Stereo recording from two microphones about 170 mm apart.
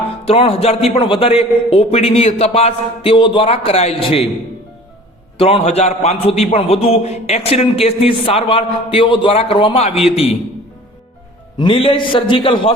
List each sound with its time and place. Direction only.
0.3 s a man's voice: 35° left (ahead or behind)
5.4 s a man's voice: 35° left (ahead or behind)
11.5 s a man's voice: 30° left (ahead or behind)